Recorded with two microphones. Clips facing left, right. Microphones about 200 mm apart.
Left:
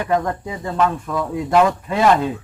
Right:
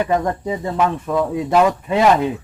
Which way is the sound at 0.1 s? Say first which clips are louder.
Right 1 dB; 20° right (ahead or behind).